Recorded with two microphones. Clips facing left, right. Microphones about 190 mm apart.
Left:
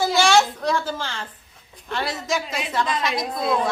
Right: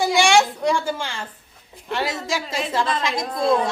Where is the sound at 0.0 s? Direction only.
15° right (ahead or behind).